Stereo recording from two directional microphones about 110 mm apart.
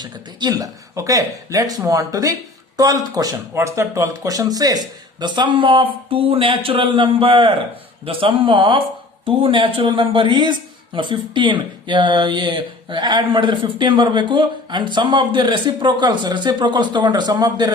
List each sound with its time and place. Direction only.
0.0 s speech: 40° right (ahead or behind)